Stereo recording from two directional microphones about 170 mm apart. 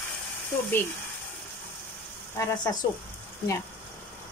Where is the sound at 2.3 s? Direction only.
15° left (ahead or behind).